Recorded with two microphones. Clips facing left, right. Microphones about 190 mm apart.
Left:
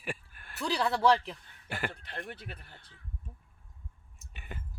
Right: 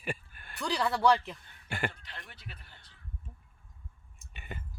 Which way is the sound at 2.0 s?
55° left (ahead or behind).